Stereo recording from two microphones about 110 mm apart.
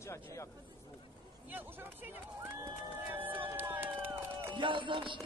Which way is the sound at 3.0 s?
15° right (ahead or behind).